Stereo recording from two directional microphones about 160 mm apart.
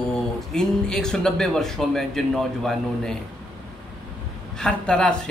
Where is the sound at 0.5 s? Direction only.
5° left (ahead or behind).